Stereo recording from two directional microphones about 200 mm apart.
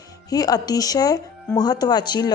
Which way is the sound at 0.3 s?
20° left (ahead or behind).